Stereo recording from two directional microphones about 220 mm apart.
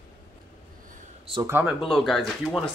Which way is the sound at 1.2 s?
25° right (ahead or behind).